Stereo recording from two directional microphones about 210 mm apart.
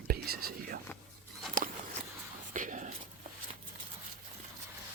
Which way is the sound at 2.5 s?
35° right (ahead or behind).